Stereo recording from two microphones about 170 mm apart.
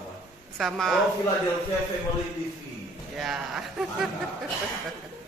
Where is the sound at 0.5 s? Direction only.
Centre (ahead or behind).